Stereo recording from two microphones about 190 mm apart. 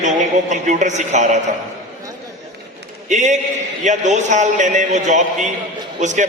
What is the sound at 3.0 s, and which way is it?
A man's voice, 40° right (ahead or behind).